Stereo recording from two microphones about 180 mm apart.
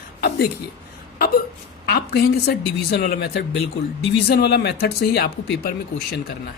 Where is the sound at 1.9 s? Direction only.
60° left (ahead or behind).